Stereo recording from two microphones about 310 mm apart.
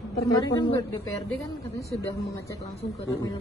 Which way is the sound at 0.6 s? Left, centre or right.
Centre.